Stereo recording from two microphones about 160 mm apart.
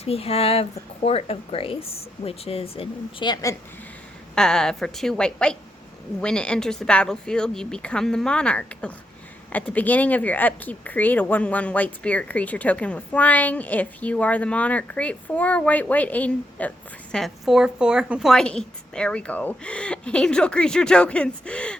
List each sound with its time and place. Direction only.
0.0 s speech: 40° left (ahead or behind); by 3.6 s 20° left (ahead or behind)
4.4 s a woman's voice: 5° left (ahead or behind)